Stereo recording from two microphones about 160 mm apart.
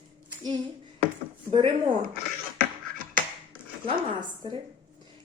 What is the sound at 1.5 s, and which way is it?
Speech, 30° right (ahead or behind).